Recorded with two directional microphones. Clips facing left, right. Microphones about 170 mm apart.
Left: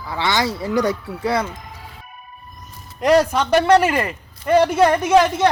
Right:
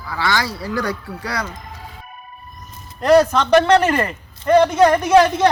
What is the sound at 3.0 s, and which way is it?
A man's voice, 10° left (ahead or behind).